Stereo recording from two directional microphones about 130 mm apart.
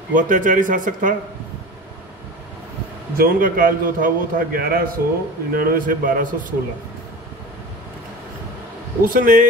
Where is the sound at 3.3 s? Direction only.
90° right.